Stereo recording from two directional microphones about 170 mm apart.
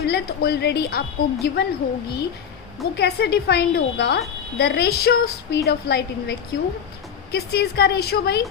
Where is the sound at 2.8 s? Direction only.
70° left (ahead or behind).